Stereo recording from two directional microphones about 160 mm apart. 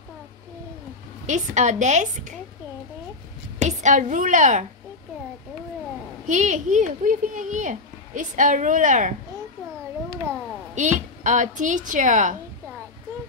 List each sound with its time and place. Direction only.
1.2 s speech: 50° right (ahead or behind)
3.6 s speech: 50° right (ahead or behind)
6.2 s speech: 50° right (ahead or behind)
10.7 s speech: 50° right (ahead or behind)